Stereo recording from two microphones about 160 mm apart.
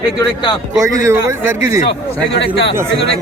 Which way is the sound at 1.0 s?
15° right (ahead or behind).